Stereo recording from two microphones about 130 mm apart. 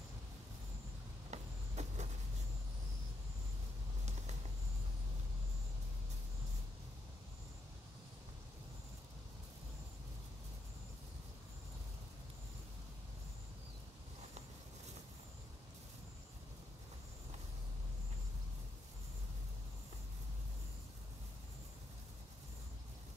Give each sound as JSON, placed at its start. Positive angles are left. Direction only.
{"t": 1.3, "sound": "vehicle", "side_deg": -60}